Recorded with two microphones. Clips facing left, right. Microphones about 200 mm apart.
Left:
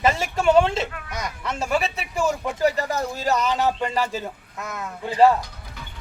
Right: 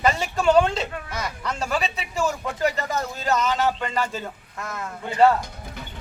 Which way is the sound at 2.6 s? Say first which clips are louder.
Left 3 dB; 35° left (ahead or behind).